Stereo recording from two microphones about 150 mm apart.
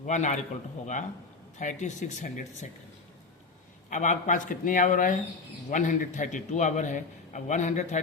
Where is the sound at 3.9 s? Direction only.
55° left (ahead or behind).